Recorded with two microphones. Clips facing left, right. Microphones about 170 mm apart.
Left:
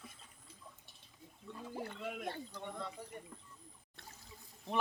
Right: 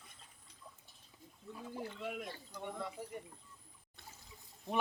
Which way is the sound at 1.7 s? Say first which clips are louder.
Left 1 dB; 55° left (ahead or behind).